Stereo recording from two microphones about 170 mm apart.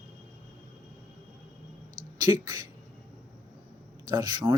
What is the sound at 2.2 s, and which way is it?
Speech, 20° right (ahead or behind).